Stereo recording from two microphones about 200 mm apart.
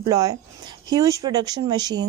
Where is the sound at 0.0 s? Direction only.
15° right (ahead or behind).